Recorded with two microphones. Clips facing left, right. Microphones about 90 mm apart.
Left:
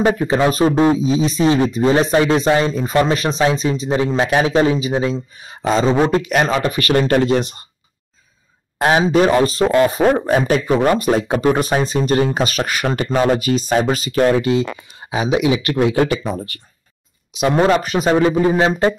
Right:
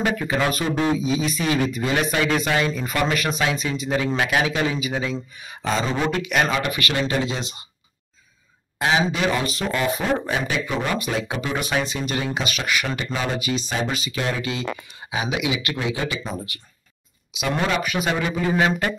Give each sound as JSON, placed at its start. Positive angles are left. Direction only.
{"t": 0.0, "sound": "a man's voice", "side_deg": 30}
{"t": 7.2, "sound": "speech", "side_deg": 60}
{"t": 8.8, "sound": "speech", "side_deg": 45}
{"t": 15.8, "sound": "speech", "side_deg": 50}
{"t": 17.4, "sound": "a man's voice", "side_deg": 35}